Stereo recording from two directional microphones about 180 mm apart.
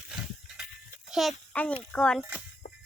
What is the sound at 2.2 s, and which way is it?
Speech, 10° right (ahead or behind).